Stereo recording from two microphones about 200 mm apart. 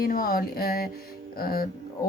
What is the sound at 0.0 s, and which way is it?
A woman's voice, 45° left (ahead or behind).